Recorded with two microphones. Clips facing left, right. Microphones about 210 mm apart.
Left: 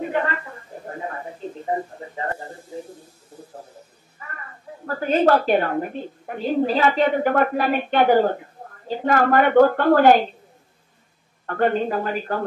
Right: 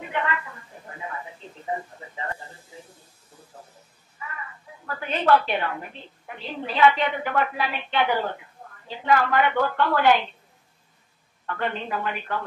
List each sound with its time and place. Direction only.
0.0 s a sound: 40° left (ahead or behind)
4.2 s a woman's voice: 45° left (ahead or behind)
11.4 s speech: 45° left (ahead or behind)